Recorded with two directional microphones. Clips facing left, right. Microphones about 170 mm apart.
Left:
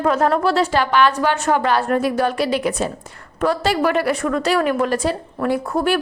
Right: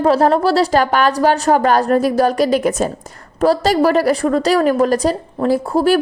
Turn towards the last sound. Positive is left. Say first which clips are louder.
# right 5 dB
turn(degrees=-35)  # may be behind; listen again after turning